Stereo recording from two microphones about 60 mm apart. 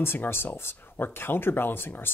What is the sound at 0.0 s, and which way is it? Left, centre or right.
Speech, left.